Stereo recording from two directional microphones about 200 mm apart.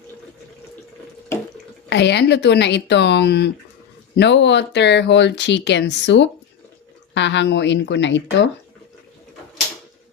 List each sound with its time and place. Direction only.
1.9 s speech: 60° left (ahead or behind)